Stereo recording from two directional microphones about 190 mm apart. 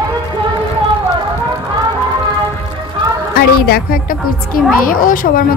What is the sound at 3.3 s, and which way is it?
A woman's voice, 50° left (ahead or behind).